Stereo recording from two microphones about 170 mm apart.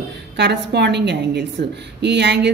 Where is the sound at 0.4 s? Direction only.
80° right.